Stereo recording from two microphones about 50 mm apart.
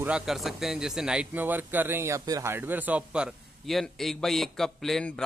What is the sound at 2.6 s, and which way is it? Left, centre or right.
Speech, right.